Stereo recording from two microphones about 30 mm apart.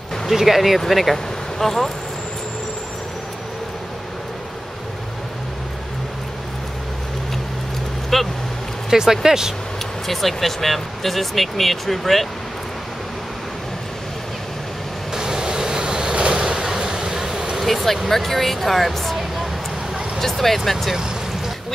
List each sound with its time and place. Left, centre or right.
0.3 s speech: centre
8.1 s a sound: centre
8.9 s speech: centre
10.0 s speech: centre
15.1 s vehicle: right
17.6 s speech: centre
20.2 s speech: centre